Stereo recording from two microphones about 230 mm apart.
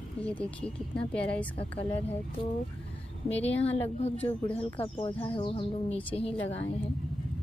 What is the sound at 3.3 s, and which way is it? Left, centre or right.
Speech, left.